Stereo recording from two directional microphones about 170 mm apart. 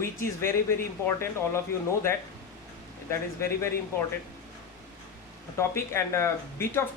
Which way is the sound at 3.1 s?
15° left (ahead or behind).